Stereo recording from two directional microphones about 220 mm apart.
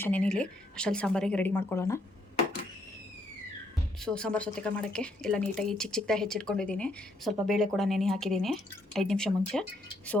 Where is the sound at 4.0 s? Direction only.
5° left (ahead or behind).